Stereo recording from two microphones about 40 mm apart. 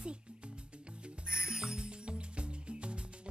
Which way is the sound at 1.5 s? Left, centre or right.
Right.